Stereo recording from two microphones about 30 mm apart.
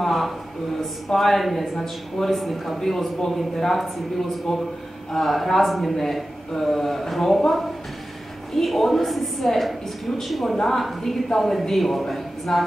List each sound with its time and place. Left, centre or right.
0.0 s a sound: centre
1.1 s a woman's voice: centre
4.5 s a woman's voice: centre
5.1 s a woman's voice: centre
8.6 s a woman's voice: centre